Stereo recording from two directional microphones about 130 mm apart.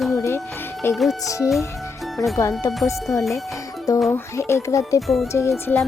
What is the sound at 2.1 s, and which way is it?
Speech, centre (ahead or behind).